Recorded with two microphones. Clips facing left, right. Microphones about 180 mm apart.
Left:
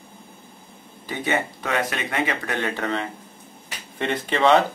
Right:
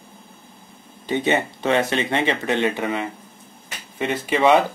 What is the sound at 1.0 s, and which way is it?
Speech, 25° right (ahead or behind).